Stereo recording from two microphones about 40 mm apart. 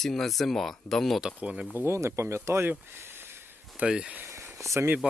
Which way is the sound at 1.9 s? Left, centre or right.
Right.